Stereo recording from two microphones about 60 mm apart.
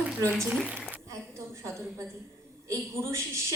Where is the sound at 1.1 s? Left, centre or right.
Right.